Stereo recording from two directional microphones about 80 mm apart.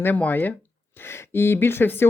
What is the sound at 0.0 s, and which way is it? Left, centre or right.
A woman's voice, left.